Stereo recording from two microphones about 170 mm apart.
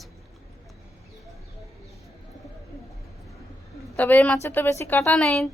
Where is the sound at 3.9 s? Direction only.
10° left (ahead or behind).